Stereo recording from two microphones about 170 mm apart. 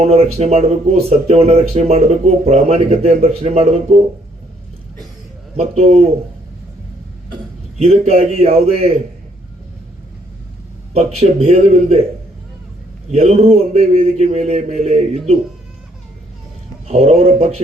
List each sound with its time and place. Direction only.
0.0 s a man's voice: 35° right (ahead or behind)
5.5 s a man's voice: 35° right (ahead or behind)
7.8 s a man's voice: 40° right (ahead or behind)
10.9 s a man's voice: 35° right (ahead or behind)
13.1 s a man's voice: 40° right (ahead or behind)
16.9 s a man's voice: 40° right (ahead or behind)